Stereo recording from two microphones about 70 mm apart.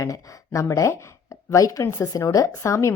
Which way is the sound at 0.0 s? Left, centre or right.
Left.